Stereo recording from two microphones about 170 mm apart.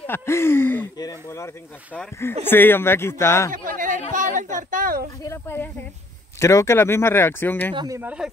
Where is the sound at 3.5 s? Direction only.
50° right (ahead or behind).